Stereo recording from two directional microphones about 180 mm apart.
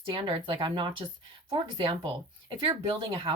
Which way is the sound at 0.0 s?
30° right (ahead or behind).